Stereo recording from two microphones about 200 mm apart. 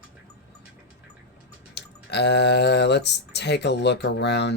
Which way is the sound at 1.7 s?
55° left (ahead or behind).